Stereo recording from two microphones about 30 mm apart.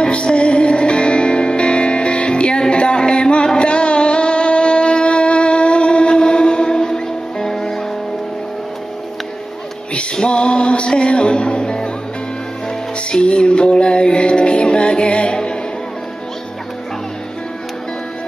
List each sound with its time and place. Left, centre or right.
0.0 s music: left
2.7 s a sound: left
3.5 s music: left; by 7.8 s centre
10.1 s music: left
13.1 s music: left